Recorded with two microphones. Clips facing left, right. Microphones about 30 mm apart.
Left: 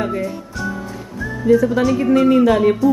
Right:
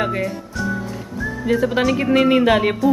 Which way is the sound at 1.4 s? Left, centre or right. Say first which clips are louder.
Left 4 dB; right.